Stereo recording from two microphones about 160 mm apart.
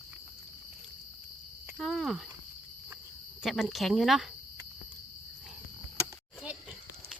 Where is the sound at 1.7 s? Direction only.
Centre (ahead or behind).